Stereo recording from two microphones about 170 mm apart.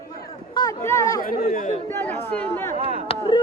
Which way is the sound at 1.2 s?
50° left (ahead or behind).